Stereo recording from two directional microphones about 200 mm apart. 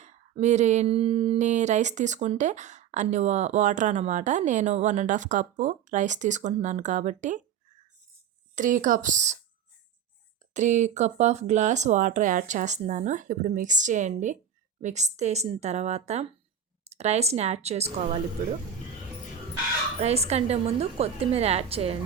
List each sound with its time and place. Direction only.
0.0 s speech: 35° right (ahead or behind)
8.5 s speech: 40° right (ahead or behind)
10.5 s speech: 35° right (ahead or behind)
20.0 s speech: 30° right (ahead or behind)